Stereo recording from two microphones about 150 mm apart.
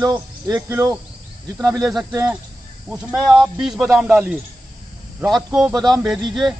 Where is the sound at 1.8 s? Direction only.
Centre (ahead or behind).